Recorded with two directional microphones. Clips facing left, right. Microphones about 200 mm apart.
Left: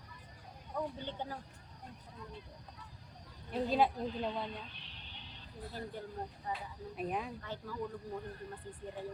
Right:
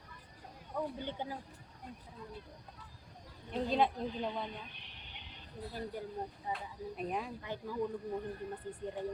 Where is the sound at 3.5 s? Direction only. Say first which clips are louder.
Even; 5° left (ahead or behind).